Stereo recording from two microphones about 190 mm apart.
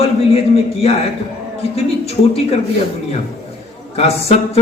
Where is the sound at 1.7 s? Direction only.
35° left (ahead or behind).